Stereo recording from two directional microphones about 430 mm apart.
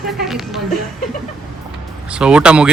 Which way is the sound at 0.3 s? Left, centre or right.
Centre.